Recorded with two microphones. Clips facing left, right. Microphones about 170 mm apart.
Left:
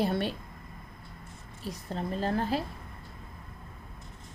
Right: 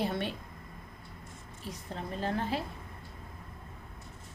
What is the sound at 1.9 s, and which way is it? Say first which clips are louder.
Speech: left 4 dB; 35° left (ahead or behind).